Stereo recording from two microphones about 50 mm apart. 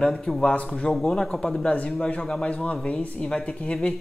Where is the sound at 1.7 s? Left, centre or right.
Left.